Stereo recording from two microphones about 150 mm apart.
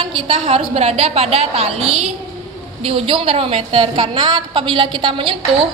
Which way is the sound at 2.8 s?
35° right (ahead or behind).